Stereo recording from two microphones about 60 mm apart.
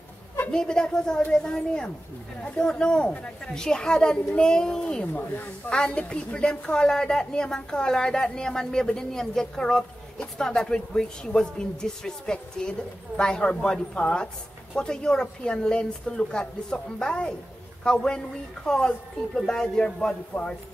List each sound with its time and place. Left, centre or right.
0.5 s a woman's voice: centre